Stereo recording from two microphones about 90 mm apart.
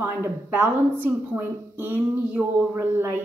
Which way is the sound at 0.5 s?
20° right (ahead or behind).